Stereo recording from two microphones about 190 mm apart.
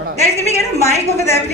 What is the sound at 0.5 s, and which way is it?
Speech, 15° left (ahead or behind).